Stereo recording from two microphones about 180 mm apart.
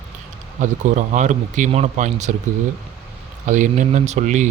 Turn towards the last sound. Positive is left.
turn(degrees=-40)  # may be behind; listen again after turning